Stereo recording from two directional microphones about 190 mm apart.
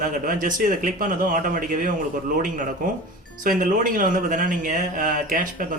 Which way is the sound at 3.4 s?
45° right (ahead or behind).